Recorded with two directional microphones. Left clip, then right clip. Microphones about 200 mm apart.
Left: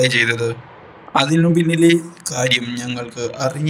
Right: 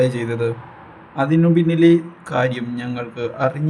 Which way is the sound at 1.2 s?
Centre (ahead or behind).